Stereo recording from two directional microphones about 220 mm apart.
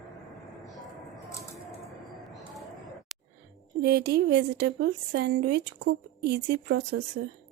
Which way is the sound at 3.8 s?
45° right (ahead or behind).